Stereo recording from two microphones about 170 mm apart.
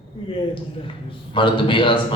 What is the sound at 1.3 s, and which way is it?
Speech, 30° left (ahead or behind).